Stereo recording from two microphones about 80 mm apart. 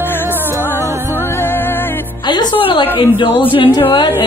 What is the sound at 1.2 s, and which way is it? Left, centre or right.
Music, left.